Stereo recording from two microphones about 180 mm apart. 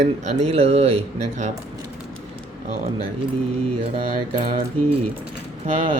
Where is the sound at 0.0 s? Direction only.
35° right (ahead or behind).